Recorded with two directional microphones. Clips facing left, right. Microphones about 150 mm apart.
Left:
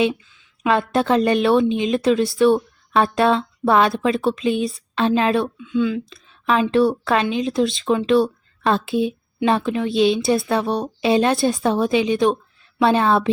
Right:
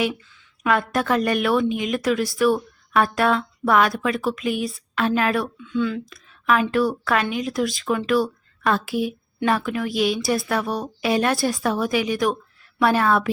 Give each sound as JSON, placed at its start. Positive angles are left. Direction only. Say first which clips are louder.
{"t": 0.6, "sound": "a woman's voice", "louder": "left 3 dB", "side_deg": 25}